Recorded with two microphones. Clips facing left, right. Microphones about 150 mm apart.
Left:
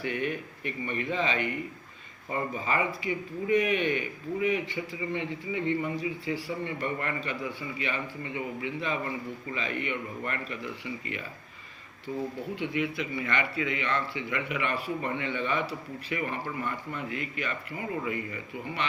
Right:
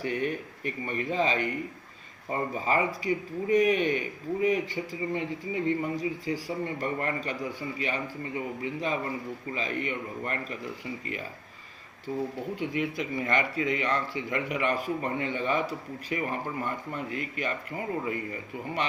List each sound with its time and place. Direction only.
0.0 s speech: 40° right (ahead or behind)
12.5 s speech: 45° right (ahead or behind)